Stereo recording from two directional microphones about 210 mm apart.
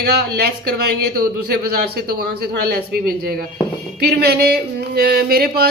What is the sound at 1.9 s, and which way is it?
Speech, 50° right (ahead or behind).